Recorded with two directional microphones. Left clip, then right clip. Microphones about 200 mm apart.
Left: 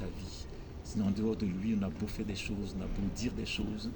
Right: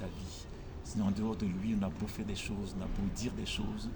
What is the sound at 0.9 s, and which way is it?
Speech, 20° right (ahead or behind).